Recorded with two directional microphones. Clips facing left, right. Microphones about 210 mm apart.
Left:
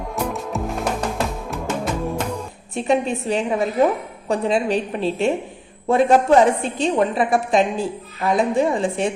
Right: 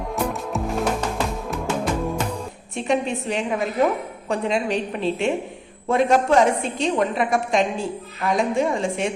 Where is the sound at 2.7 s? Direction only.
35° left (ahead or behind).